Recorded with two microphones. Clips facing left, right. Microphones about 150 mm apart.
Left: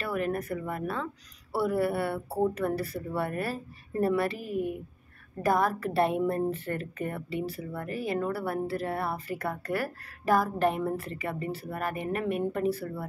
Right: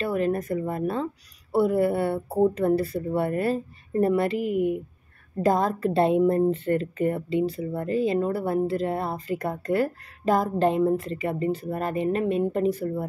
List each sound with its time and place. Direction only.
0.0 s a woman's voice: 25° right (ahead or behind)